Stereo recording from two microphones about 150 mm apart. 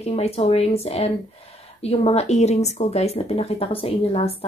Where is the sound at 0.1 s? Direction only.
40° left (ahead or behind).